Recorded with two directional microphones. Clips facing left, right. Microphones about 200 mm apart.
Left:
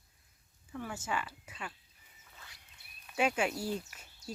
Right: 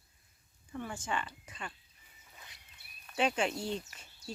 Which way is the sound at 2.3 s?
20° right (ahead or behind).